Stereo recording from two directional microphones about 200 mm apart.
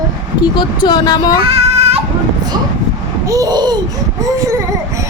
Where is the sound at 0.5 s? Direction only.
20° left (ahead or behind).